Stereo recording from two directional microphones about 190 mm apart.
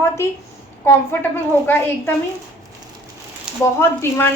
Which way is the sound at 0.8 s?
10° left (ahead or behind).